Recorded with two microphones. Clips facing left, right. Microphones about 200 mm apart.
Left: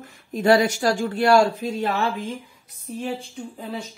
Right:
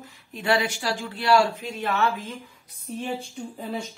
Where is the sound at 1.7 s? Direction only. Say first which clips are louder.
Right 3 dB; 35° left (ahead or behind).